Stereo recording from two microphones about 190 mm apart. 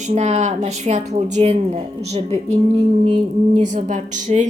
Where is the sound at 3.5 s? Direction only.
40° right (ahead or behind).